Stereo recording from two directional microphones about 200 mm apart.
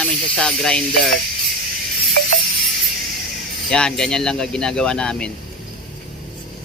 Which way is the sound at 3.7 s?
5° left (ahead or behind).